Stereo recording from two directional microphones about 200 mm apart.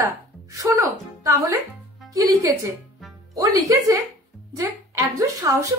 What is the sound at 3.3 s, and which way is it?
A woman's voice, 15° right (ahead or behind).